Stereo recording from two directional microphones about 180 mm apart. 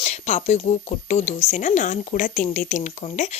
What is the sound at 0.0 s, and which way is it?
Speech, 40° left (ahead or behind).